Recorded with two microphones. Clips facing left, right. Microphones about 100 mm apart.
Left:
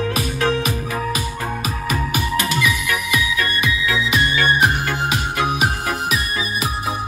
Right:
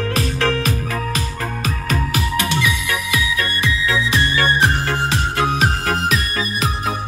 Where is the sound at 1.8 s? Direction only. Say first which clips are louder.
Even; 20° left (ahead or behind).